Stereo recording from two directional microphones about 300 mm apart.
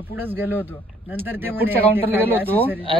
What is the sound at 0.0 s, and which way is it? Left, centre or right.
Speech, centre.